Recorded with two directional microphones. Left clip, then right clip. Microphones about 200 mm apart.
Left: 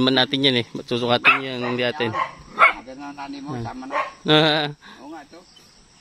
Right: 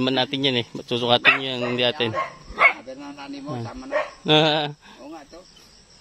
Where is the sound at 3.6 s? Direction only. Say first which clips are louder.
Left 3 dB; 20° left (ahead or behind).